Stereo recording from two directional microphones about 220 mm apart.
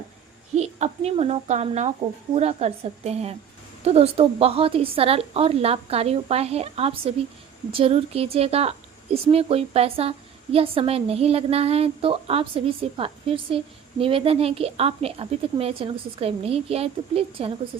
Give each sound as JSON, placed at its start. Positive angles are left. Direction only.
{"t": 0.5, "sound": "a woman's voice", "side_deg": -30}